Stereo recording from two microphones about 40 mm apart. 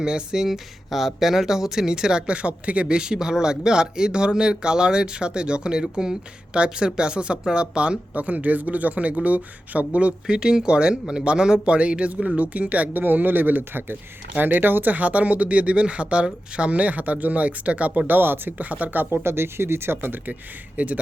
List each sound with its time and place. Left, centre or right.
0.0 s speech: centre
0.4 s speech: centre; by 7.9 s right
8.1 s speech: right
10.2 s speech: right
13.0 s speech: right
18.1 s speech: right
18.5 s speech: right
19.1 s speech: right
20.7 s speech: right